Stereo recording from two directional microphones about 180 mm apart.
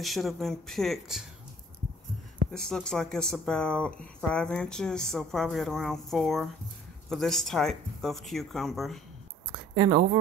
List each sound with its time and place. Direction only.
0.0 s speech: centre (ahead or behind)
2.5 s speech: 5° left (ahead or behind)
9.8 s speech: 20° right (ahead or behind)